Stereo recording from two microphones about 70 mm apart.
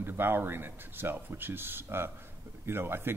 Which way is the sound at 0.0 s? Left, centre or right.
Right.